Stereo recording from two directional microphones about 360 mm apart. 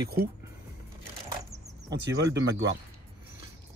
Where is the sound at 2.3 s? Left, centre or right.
Centre.